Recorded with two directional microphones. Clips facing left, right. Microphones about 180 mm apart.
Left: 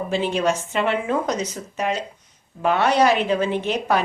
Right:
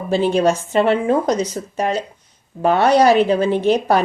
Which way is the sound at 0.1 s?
35° right (ahead or behind).